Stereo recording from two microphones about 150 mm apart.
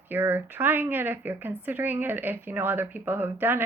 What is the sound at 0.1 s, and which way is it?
Speech, 15° right (ahead or behind).